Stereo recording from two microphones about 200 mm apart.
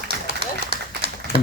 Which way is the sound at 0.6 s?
30° right (ahead or behind).